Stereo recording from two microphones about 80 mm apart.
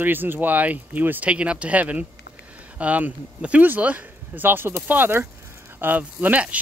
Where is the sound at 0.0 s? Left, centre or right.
Right.